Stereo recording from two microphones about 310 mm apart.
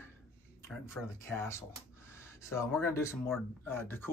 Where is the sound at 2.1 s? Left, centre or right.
Centre.